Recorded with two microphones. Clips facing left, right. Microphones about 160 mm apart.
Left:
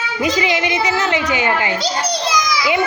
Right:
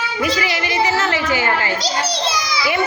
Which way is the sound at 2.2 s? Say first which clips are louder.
Left 3 dB; 30° right (ahead or behind).